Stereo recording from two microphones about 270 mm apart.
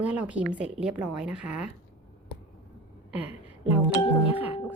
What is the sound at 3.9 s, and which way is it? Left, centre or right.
Music, left.